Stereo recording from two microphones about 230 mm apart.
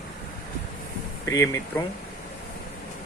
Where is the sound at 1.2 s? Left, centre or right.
Centre.